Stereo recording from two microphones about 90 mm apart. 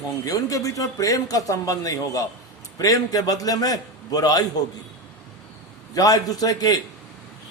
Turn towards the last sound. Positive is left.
turn(degrees=45)  # may be behind; listen again after turning